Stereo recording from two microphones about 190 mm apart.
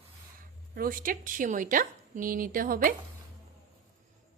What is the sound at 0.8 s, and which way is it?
A woman's voice, 50° right (ahead or behind).